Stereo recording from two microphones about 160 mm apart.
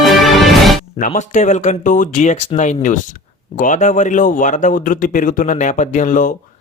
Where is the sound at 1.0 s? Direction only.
50° left (ahead or behind).